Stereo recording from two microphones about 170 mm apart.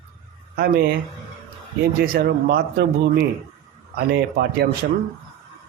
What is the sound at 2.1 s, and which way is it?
Speech, 65° right (ahead or behind).